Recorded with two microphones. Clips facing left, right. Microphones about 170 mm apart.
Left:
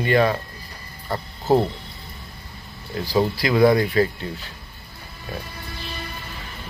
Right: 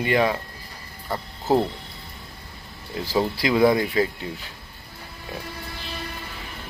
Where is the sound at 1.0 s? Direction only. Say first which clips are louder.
Left 2 dB; centre (ahead or behind).